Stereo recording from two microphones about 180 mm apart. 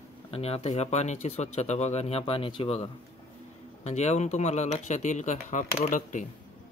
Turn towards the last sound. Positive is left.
turn(degrees=45)  # may be behind; listen again after turning